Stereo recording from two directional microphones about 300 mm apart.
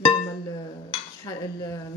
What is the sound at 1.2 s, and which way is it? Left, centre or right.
Speech, centre.